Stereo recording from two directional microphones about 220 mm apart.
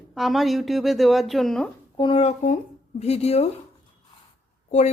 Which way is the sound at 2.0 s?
25° left (ahead or behind).